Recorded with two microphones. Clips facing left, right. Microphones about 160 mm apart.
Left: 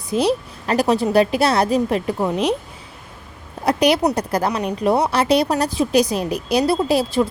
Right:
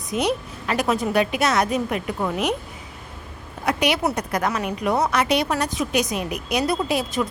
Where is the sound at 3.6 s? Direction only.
35° left (ahead or behind).